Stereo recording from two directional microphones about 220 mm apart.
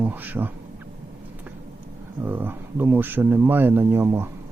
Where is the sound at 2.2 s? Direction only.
10° right (ahead or behind).